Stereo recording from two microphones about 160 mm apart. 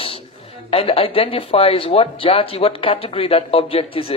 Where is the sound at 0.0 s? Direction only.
35° left (ahead or behind).